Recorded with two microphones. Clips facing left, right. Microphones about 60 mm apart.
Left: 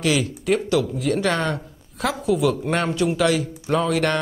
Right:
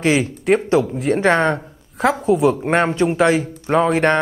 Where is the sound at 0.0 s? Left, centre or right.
Right.